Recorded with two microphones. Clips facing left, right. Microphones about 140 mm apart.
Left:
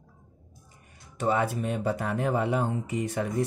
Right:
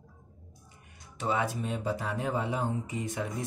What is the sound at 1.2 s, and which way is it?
Speech, 50° left (ahead or behind).